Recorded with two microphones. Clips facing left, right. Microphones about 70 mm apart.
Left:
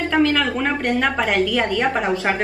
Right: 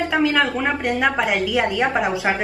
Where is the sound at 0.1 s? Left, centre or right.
Centre.